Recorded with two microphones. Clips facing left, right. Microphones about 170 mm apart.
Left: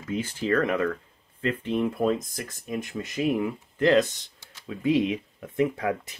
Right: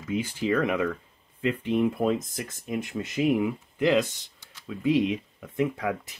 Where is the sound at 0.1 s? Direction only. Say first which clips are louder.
Even; 10° right (ahead or behind).